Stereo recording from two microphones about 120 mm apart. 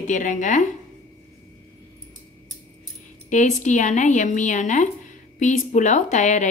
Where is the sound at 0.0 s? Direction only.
90° left.